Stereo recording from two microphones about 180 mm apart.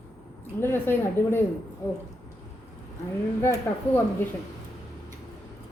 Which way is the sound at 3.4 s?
15° left (ahead or behind).